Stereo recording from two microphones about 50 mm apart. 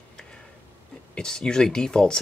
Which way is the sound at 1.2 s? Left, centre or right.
Centre.